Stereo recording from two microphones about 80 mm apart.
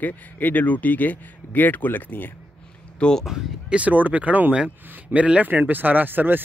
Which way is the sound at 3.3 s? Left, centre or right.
Centre.